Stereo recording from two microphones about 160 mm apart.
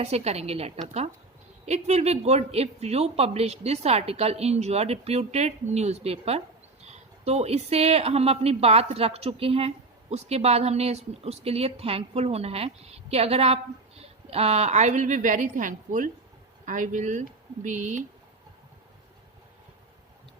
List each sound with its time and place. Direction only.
0.0 s a woman's voice: 40° right (ahead or behind)